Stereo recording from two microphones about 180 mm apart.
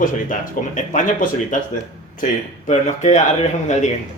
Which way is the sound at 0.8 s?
45° left (ahead or behind).